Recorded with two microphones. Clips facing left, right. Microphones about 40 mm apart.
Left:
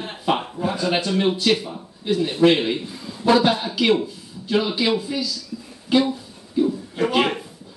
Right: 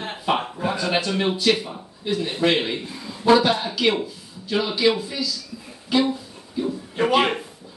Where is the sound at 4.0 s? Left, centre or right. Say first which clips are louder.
Left 1 dB; centre.